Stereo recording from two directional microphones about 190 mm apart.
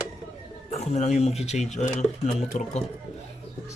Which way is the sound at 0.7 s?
35° left (ahead or behind).